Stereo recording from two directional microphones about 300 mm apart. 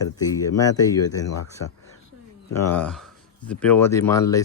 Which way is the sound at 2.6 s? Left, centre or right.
Centre.